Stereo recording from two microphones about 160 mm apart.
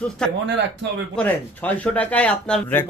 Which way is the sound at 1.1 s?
10° left (ahead or behind).